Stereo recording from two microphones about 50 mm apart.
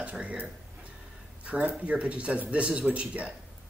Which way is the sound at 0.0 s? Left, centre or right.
Right.